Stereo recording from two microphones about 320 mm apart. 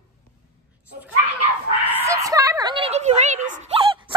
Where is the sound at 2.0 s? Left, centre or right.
Centre.